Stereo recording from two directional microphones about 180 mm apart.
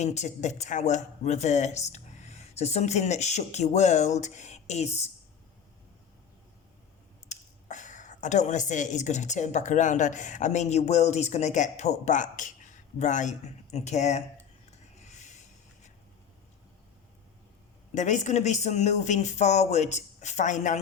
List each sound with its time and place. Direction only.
0.0 s speech: 40° left (ahead or behind)
7.3 s speech: 45° left (ahead or behind)
15.0 s a sound: 40° left (ahead or behind)
17.9 s speech: 40° left (ahead or behind)